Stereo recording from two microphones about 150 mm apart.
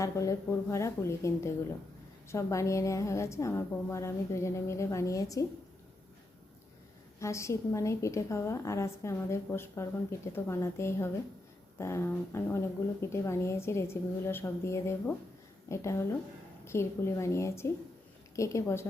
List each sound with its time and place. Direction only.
0.0 s a woman's voice: 20° left (ahead or behind)
7.2 s a woman's voice: 20° left (ahead or behind)